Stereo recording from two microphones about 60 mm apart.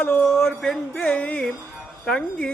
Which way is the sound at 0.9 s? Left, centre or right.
Left.